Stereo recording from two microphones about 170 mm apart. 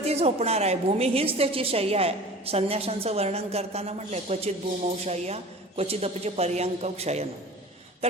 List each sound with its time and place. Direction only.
0.0 s a woman's voice: 40° right (ahead or behind)